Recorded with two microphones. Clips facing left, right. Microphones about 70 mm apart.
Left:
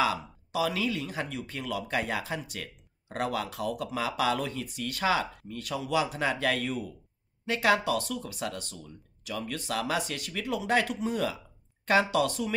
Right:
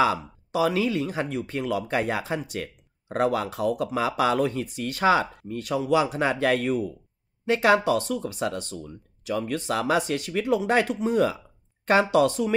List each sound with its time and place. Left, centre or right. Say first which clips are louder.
0.0 s speech: right 5 dB; right